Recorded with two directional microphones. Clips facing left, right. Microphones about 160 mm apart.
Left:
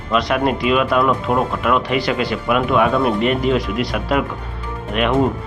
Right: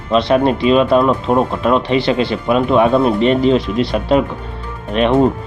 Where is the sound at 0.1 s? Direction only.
30° right (ahead or behind).